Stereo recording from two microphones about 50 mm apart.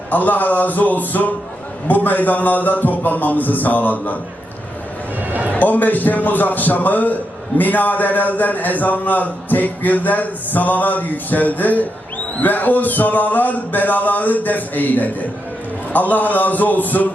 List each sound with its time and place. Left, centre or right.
0.1 s a man's voice: left
5.5 s a man's voice: left